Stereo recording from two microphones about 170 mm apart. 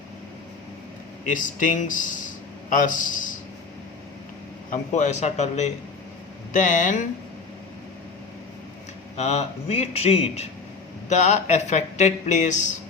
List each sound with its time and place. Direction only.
1.3 s a man's voice: 50° left (ahead or behind)
4.7 s a man's voice: 45° left (ahead or behind)
9.1 s a man's voice: 40° left (ahead or behind)